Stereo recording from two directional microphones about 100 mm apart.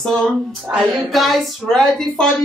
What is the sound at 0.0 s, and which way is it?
A woman's voice, 5° left (ahead or behind).